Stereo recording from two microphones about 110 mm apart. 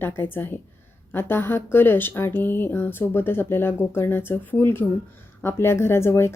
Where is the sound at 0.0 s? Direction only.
20° left (ahead or behind).